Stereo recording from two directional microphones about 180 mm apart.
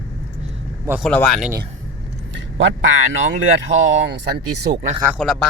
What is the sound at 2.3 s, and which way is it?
Speech, 90° right.